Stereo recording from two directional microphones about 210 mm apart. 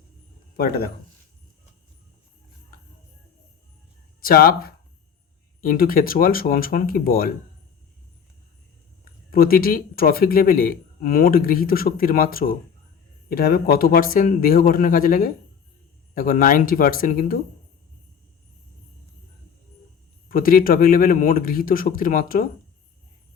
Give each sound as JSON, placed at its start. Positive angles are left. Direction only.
{"t": 0.5, "sound": "speech", "side_deg": 45}
{"t": 4.2, "sound": "speech", "side_deg": 45}
{"t": 9.3, "sound": "speech", "side_deg": 45}
{"t": 20.2, "sound": "speech", "side_deg": 40}